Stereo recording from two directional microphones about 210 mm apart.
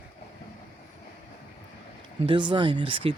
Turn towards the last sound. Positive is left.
turn(degrees=-25)  # may be behind; listen again after turning